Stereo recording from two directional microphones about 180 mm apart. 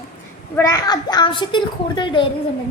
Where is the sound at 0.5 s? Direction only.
20° left (ahead or behind).